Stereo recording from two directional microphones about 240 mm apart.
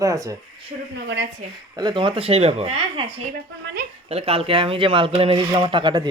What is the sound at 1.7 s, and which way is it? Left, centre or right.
Speech, centre.